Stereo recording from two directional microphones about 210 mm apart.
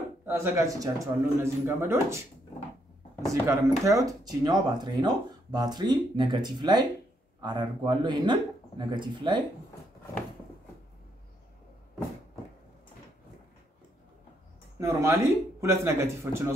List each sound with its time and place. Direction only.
0.2 s a man's voice: 10° right (ahead or behind)
3.3 s speech: 15° right (ahead or behind)
14.8 s a man's voice: 15° right (ahead or behind)